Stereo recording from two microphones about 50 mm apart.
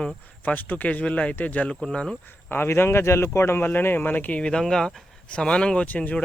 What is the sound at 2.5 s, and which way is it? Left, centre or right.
Speech, left.